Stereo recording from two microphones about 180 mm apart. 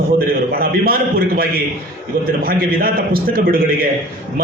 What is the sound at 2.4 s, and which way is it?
A man's voice, 55° right (ahead or behind).